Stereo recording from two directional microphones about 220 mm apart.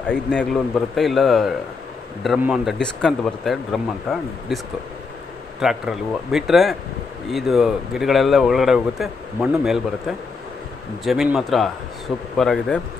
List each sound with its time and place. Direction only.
0.0 s speech: 5° left (ahead or behind)
5.6 s speech: centre (ahead or behind)